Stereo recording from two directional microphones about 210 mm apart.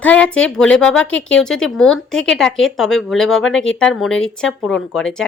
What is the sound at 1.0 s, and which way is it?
Speech, 65° left (ahead or behind).